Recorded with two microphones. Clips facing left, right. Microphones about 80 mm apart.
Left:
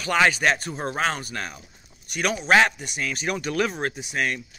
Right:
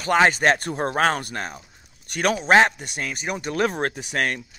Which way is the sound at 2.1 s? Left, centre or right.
Right.